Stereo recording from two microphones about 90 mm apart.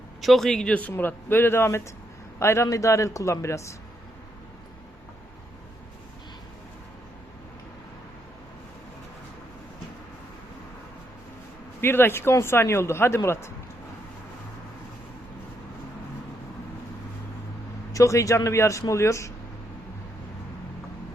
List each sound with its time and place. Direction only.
0.2 s speech: centre (ahead or behind); by 3.8 s 35° left (ahead or behind)
11.8 s speech: 25° left (ahead or behind)
17.9 s speech: 35° left (ahead or behind)